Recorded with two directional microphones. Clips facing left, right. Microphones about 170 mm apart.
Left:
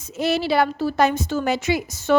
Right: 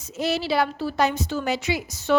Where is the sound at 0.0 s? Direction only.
55° left (ahead or behind).